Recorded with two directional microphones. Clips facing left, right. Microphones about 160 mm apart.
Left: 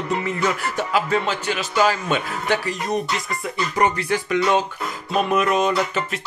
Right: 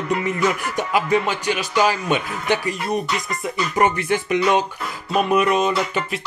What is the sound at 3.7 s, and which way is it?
Music, 20° right (ahead or behind).